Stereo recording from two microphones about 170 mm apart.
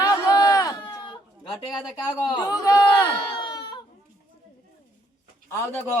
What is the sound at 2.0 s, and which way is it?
Speech, 25° left (ahead or behind).